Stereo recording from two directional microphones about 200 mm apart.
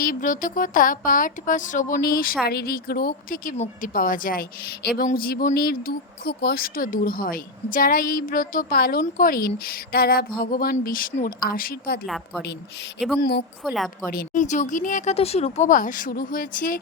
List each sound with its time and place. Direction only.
0.0 s speech: 45° left (ahead or behind)
12.0 s a woman's voice: centre (ahead or behind)
13.1 s speech: 50° left (ahead or behind)
13.7 s a woman's voice: centre (ahead or behind)
14.1 s speech: 45° left (ahead or behind)